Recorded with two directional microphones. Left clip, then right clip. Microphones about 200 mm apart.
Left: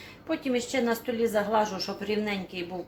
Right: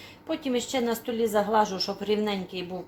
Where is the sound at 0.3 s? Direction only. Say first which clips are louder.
Even; 25° right (ahead or behind).